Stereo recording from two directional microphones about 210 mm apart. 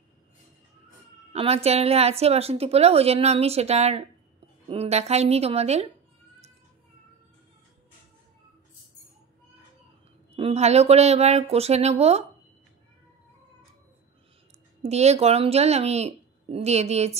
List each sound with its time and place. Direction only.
1.3 s a woman's voice: 30° right (ahead or behind)
10.3 s speech: 30° right (ahead or behind)
14.8 s speech: 30° right (ahead or behind)